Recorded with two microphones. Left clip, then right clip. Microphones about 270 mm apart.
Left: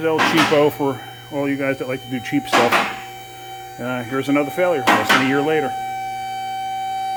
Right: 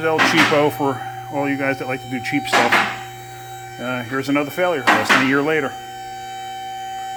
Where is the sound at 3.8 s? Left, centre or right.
Centre.